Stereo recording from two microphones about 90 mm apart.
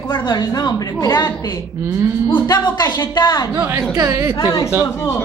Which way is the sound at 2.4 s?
50° left (ahead or behind).